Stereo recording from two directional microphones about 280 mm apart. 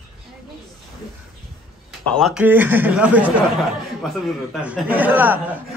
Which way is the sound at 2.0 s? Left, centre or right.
Centre.